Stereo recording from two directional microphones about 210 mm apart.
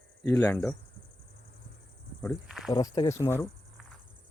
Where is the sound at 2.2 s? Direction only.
Centre (ahead or behind).